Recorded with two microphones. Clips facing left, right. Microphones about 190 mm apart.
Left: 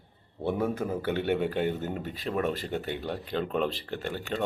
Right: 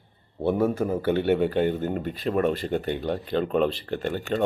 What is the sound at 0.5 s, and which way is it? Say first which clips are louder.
Speech: right 5 dB; 5° right (ahead or behind).